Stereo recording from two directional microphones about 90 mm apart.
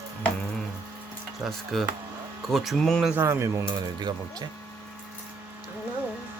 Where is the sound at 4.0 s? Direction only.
55° right (ahead or behind).